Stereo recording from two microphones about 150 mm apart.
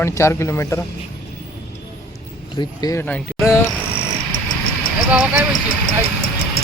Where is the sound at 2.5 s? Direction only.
30° left (ahead or behind).